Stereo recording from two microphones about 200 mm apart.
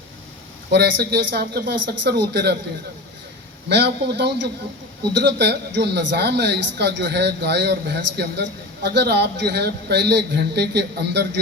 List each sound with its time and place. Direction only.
0.7 s speech: 55° right (ahead or behind)
3.7 s speech: 60° right (ahead or behind)